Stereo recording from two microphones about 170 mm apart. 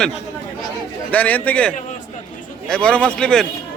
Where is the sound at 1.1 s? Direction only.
10° left (ahead or behind).